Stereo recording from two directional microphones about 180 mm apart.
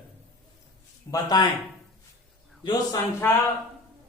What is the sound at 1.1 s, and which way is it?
Speech, 20° left (ahead or behind).